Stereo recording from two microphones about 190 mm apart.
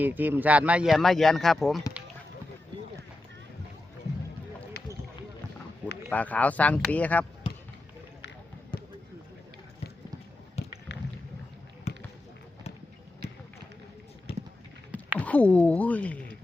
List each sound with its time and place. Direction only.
0.0 s speech: 10° right (ahead or behind)
6.1 s speech: 10° left (ahead or behind)
8.7 s basketball bounce: 25° left (ahead or behind)
10.6 s a sound: 35° left (ahead or behind)
11.9 s basketball bounce: 35° left (ahead or behind)
14.3 s run: 30° left (ahead or behind)
15.2 s a sound: 5° left (ahead or behind)